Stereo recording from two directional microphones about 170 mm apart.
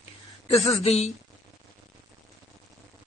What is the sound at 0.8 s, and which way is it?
Speech, 40° left (ahead or behind).